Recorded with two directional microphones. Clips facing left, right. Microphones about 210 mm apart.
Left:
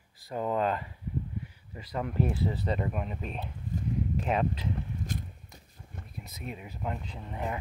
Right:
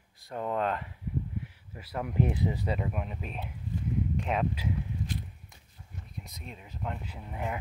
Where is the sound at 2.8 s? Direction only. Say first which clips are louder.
Left 2 dB; centre (ahead or behind).